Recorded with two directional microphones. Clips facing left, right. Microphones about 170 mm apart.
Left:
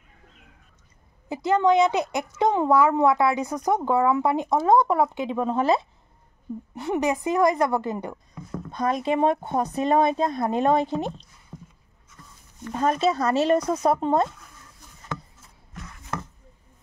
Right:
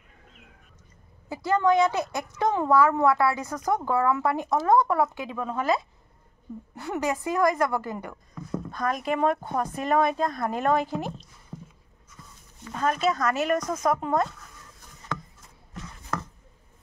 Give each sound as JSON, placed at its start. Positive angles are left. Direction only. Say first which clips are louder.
{"t": 1.3, "sound": "speech", "louder": "left 2 dB", "side_deg": 20}
{"t": 11.5, "sound": "a sound", "louder": "right 2 dB", "side_deg": 0}
{"t": 12.7, "sound": "speech", "louder": "left 3 dB", "side_deg": 30}